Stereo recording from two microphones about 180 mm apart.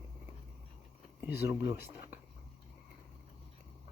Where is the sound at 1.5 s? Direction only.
15° right (ahead or behind).